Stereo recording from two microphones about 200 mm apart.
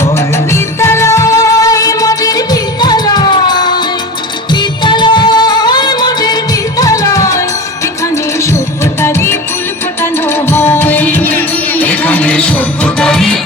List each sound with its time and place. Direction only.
0.0 s music: 15° left (ahead or behind)